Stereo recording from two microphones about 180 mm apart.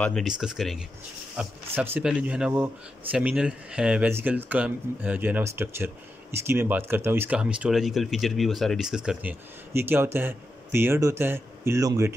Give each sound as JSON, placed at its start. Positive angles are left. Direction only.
{"t": 0.0, "sound": "speech", "side_deg": 0}